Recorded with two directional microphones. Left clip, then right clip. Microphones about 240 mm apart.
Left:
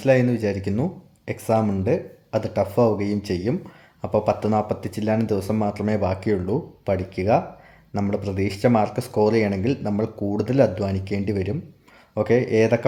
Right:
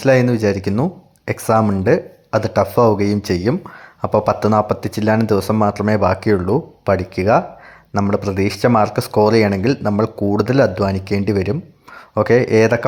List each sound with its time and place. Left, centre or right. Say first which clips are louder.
0.3 s speech: right 7 dB; centre